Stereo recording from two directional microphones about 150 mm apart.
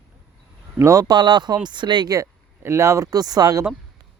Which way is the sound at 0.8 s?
20° right (ahead or behind).